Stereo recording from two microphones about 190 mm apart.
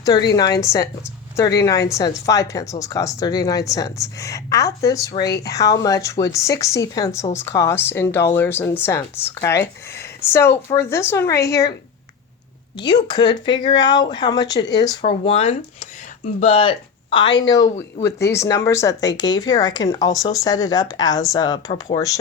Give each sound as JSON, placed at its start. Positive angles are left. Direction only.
{"t": 0.3, "sound": "speech", "side_deg": 20}
{"t": 13.1, "sound": "speech", "side_deg": 20}
{"t": 15.0, "sound": "speech", "side_deg": 30}